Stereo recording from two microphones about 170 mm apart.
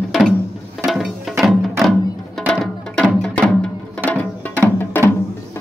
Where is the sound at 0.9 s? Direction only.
Centre (ahead or behind).